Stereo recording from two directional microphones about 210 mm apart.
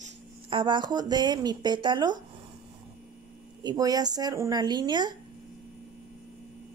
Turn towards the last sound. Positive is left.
turn(degrees=-20)  # may be behind; listen again after turning